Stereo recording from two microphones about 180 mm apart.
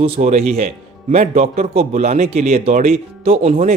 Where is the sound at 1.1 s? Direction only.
40° right (ahead or behind).